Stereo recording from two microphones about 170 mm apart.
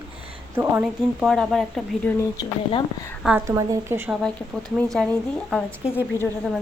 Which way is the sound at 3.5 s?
20° right (ahead or behind).